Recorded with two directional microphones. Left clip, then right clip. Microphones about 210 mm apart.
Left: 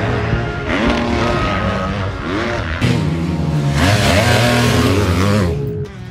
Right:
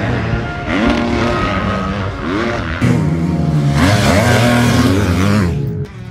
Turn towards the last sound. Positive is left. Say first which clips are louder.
# even
turn(degrees=45)  # may be behind; listen again after turning